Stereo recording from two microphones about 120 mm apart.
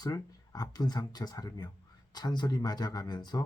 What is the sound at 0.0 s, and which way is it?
Speech, 30° left (ahead or behind).